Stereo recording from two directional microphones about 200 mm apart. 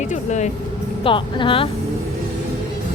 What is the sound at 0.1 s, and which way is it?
Speech, 35° left (ahead or behind).